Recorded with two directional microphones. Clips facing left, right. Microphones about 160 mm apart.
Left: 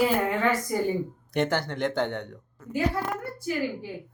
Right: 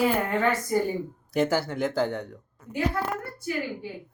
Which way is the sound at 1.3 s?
5° right (ahead or behind).